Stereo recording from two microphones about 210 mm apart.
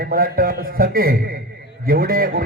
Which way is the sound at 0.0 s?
45° right (ahead or behind).